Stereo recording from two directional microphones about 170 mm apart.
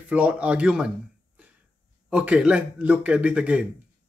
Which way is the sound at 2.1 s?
5° right (ahead or behind).